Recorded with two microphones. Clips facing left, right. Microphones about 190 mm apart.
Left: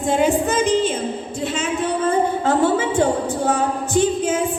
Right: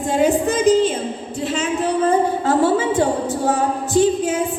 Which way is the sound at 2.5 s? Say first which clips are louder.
Right 2 dB; 40° right (ahead or behind).